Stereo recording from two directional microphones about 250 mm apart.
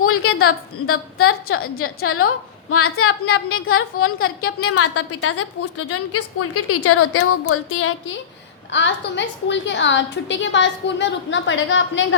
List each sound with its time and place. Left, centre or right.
0.0 s a woman's voice: left
8.7 s a woman's voice: left